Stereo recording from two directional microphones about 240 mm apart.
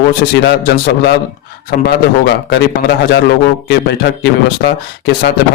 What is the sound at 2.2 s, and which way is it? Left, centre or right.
Speech, left.